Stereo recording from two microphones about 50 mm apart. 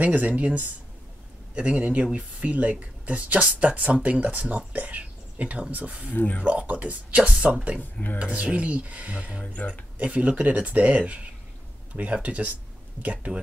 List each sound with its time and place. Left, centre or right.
0.0 s speech: right
6.1 s speech: left
6.4 s speech: right
7.2 s speech: centre
7.8 s speech: left
8.2 s speech: right
9.4 s speech: left
9.9 s speech: right